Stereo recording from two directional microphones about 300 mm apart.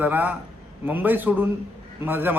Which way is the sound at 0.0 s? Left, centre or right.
Centre.